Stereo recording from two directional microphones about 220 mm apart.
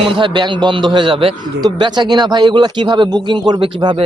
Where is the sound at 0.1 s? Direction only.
20° right (ahead or behind).